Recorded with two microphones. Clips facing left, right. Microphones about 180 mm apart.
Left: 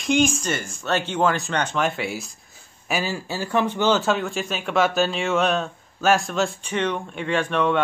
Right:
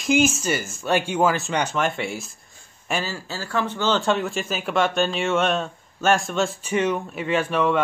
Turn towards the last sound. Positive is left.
turn(degrees=-5)  # may be behind; listen again after turning